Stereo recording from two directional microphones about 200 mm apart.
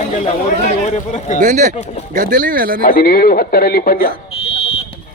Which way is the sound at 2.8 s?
45° left (ahead or behind).